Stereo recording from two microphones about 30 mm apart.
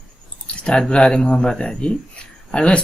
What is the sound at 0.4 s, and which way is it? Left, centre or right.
Speech, left.